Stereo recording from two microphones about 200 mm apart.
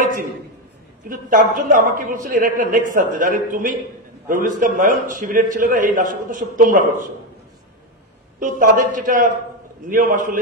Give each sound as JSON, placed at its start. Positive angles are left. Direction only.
{"t": 1.0, "sound": "a man's voice", "side_deg": -40}
{"t": 8.4, "sound": "a man's voice", "side_deg": -40}